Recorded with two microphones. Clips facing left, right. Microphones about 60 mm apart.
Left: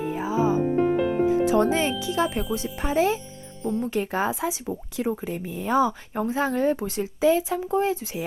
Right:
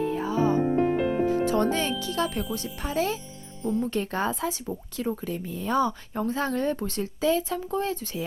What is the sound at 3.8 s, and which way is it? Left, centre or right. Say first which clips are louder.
Speech: left 2 dB; centre.